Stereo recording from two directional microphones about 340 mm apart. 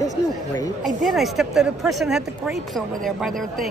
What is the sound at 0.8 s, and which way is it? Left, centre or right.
Speech, centre.